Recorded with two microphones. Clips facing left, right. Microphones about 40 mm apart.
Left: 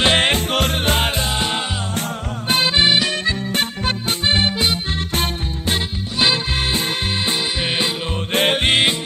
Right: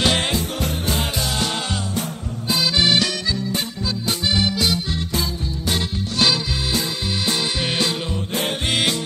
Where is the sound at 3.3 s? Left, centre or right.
Left.